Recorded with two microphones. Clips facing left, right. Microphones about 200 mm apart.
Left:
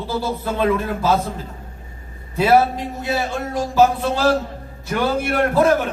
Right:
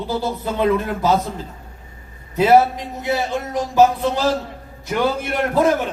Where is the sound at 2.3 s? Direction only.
15° right (ahead or behind).